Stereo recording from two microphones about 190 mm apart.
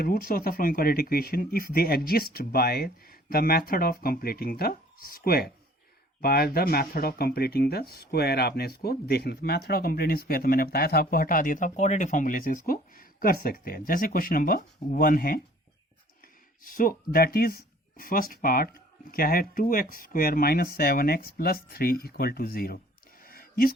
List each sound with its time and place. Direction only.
0.0 s speech: 50° left (ahead or behind)
16.6 s speech: 45° left (ahead or behind)
23.2 s a sound: 50° left (ahead or behind)